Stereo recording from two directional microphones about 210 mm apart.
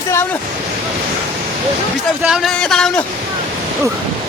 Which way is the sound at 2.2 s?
Centre (ahead or behind).